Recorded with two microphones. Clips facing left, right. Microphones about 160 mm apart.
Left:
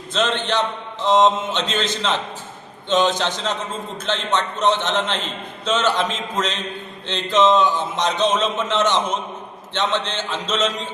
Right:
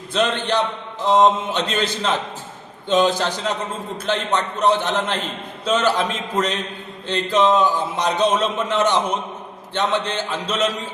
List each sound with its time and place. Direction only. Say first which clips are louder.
0.1 s a man's voice: right 1 dB; 10° right (ahead or behind)